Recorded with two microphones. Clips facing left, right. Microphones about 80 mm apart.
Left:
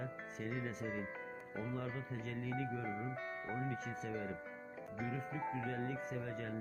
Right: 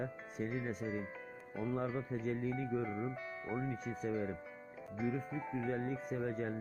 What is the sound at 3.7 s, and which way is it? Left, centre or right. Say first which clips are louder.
Speech: right 4 dB; left.